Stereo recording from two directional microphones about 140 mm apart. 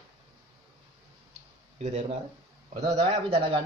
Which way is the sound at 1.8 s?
50° right (ahead or behind).